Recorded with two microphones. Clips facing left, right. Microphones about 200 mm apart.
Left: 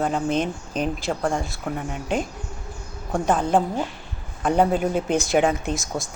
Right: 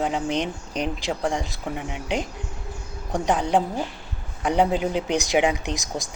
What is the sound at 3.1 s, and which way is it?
Speech, 15° right (ahead or behind).